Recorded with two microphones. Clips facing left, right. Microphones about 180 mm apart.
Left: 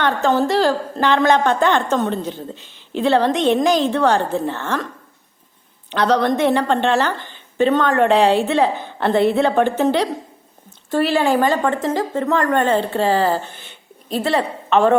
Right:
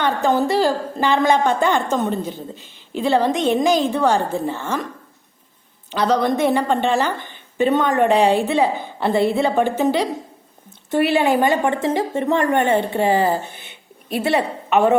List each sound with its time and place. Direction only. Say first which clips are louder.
0.0 s a woman's voice: left 1 dB; 15° right (ahead or behind)
5.9 s a woman's voice: left 1 dB; 5° right (ahead or behind)
7.8 s a woman's voice: even; 5° right (ahead or behind)